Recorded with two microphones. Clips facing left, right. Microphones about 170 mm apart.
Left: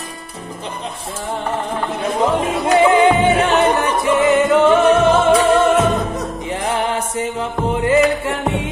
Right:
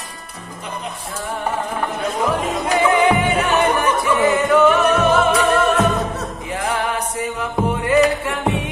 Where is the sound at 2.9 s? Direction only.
25° left (ahead or behind).